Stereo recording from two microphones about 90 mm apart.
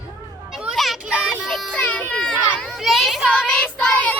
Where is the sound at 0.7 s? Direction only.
Centre (ahead or behind).